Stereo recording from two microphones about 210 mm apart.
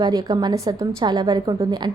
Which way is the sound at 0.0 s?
20° right (ahead or behind).